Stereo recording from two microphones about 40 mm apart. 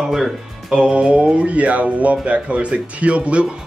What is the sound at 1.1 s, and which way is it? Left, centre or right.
Speech, right.